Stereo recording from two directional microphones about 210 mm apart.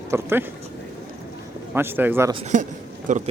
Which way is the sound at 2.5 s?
35° right (ahead or behind).